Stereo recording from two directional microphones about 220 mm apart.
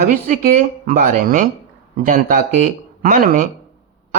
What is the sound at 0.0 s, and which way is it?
Speech, 35° right (ahead or behind).